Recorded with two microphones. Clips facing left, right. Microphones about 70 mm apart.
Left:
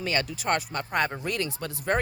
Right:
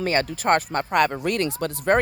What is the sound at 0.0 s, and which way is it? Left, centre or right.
Speech, right.